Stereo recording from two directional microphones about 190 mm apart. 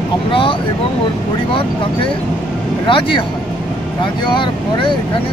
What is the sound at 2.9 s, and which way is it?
Speech, 25° left (ahead or behind).